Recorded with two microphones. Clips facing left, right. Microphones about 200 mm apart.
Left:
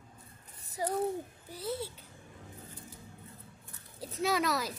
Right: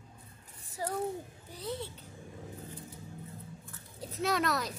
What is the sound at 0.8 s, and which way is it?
Speech, 15° left (ahead or behind).